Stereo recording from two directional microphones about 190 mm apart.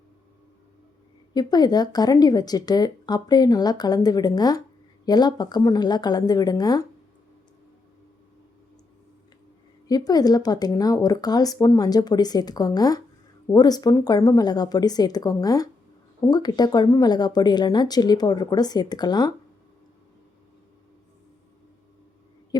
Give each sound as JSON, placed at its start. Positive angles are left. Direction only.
{"t": 1.3, "sound": "speech", "side_deg": 20}
{"t": 9.8, "sound": "speech", "side_deg": 20}